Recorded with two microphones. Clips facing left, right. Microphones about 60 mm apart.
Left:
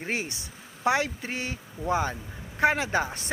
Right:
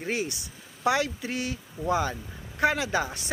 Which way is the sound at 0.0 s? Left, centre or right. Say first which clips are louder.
Right 1 dB; left.